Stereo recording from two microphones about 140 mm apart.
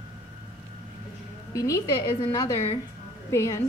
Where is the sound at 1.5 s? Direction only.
20° left (ahead or behind).